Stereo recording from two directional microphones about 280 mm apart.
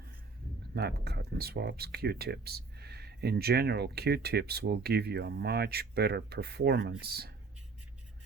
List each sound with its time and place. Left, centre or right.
0.7 s speech: right